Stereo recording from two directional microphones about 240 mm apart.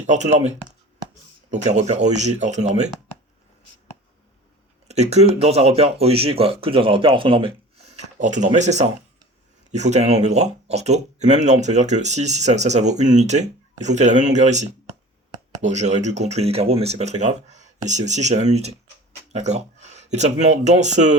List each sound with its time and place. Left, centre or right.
0.1 s speech: right
4.9 s speech: right